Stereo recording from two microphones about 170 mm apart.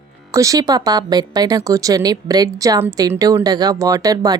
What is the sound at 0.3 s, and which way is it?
Speech, 20° right (ahead or behind).